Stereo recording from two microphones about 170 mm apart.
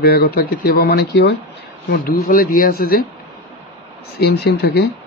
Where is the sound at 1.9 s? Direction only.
60° left (ahead or behind).